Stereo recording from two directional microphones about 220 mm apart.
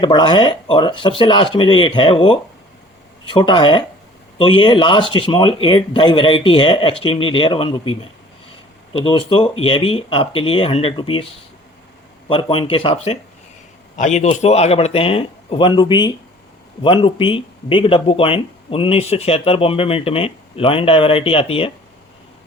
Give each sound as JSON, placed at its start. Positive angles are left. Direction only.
{"t": 0.0, "sound": "speech", "side_deg": 20}
{"t": 12.3, "sound": "speech", "side_deg": 25}